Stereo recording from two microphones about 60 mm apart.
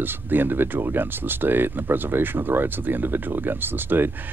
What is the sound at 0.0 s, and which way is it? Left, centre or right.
Speech, right.